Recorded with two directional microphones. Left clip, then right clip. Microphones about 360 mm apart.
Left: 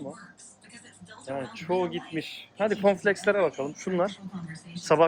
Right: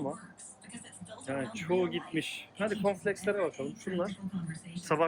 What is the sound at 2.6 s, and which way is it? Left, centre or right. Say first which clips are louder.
Speech: left 8 dB; centre.